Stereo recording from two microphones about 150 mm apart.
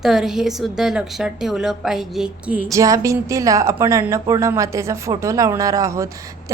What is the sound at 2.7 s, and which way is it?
A woman's voice, 20° right (ahead or behind).